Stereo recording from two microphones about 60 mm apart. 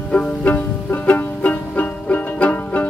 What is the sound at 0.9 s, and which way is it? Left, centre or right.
Banjo, left.